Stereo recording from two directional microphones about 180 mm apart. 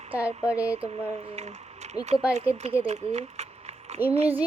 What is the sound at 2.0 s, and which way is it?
Speech, 20° left (ahead or behind).